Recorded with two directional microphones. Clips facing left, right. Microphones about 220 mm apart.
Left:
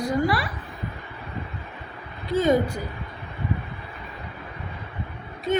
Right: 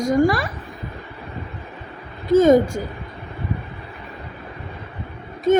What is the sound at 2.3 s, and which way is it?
Speech, 45° right (ahead or behind).